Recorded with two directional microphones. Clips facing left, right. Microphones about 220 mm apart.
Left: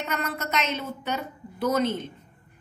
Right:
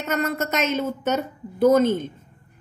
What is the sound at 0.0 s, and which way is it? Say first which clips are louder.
A woman's voice: right 6 dB; 45° right (ahead or behind).